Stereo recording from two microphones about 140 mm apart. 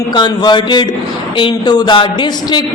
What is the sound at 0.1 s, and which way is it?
A man's voice, 30° left (ahead or behind).